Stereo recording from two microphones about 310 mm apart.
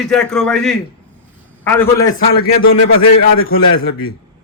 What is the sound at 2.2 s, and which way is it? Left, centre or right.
Speech, left.